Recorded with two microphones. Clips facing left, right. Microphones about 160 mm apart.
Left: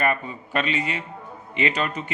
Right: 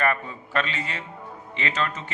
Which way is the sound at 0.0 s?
15° left (ahead or behind).